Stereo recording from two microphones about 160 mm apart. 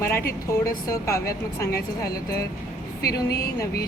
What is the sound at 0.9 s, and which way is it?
A woman's voice, 20° left (ahead or behind).